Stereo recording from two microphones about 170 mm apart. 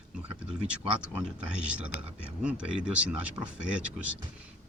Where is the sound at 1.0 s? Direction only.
5° right (ahead or behind).